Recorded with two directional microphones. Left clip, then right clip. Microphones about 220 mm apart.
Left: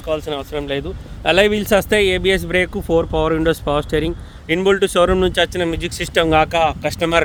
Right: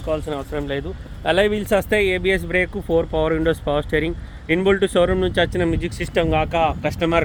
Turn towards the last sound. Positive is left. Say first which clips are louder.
# left 3 dB
turn(degrees=25)  # may be behind; listen again after turning